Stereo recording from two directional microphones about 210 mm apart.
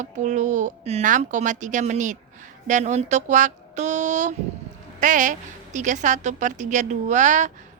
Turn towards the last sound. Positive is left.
turn(degrees=-35)  # may be behind; listen again after turning